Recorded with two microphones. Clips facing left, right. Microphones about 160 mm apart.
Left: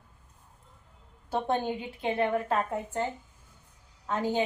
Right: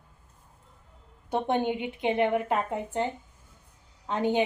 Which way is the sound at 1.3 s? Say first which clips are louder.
Right 2 dB; 20° right (ahead or behind).